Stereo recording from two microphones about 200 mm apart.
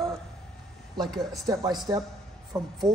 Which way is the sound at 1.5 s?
20° right (ahead or behind).